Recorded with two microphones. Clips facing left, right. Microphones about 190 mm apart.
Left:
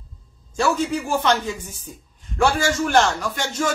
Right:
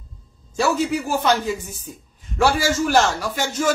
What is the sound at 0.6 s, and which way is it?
A man's voice, 5° right (ahead or behind).